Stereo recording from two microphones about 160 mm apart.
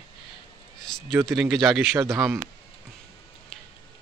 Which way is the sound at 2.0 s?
20° right (ahead or behind).